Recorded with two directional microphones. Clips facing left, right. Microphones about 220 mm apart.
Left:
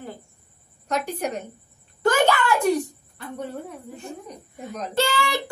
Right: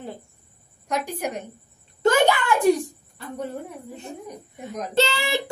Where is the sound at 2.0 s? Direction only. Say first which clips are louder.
Right 1 dB; 20° right (ahead or behind).